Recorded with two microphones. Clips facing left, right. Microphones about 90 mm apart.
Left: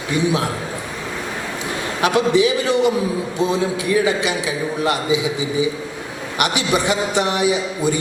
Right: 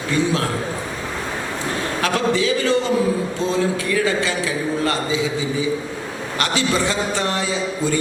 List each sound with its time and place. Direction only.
0.1 s a man's voice: 15° left (ahead or behind)
2.0 s a man's voice: 15° left (ahead or behind)